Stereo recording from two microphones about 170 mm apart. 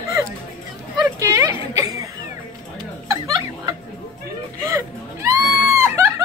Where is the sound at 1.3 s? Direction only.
20° right (ahead or behind).